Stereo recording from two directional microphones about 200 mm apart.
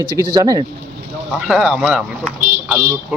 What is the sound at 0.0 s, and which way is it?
Speech, 20° right (ahead or behind).